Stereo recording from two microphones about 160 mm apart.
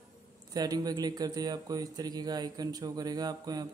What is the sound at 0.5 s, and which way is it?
A man's voice, 25° right (ahead or behind).